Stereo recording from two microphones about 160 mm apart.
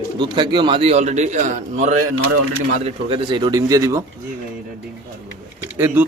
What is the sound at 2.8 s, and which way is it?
A man's voice, 35° right (ahead or behind).